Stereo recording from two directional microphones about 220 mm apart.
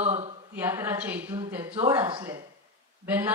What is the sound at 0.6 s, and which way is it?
A woman's voice, 10° right (ahead or behind).